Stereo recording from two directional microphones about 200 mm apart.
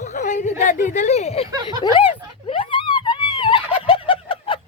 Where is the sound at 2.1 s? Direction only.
25° left (ahead or behind).